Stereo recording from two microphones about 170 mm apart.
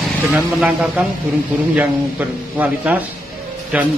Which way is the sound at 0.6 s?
5° right (ahead or behind).